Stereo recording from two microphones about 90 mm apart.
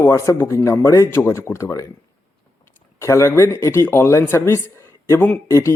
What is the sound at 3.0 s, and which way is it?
Speech, 35° left (ahead or behind).